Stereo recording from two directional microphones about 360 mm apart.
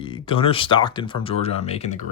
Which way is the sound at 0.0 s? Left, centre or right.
Centre.